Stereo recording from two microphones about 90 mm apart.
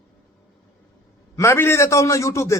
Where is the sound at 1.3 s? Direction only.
30° left (ahead or behind).